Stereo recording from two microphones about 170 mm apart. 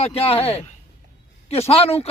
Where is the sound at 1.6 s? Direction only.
35° left (ahead or behind).